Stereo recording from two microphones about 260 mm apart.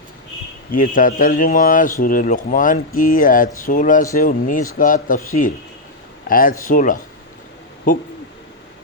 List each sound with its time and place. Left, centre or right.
0.7 s speech: left
6.2 s speech: left